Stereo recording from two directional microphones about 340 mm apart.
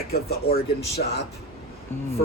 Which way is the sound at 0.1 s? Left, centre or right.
Left.